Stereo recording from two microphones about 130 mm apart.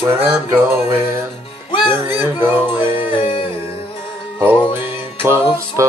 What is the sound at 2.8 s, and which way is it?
Music, 40° left (ahead or behind).